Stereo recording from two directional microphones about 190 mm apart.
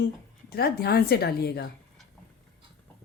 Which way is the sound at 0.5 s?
55° left (ahead or behind).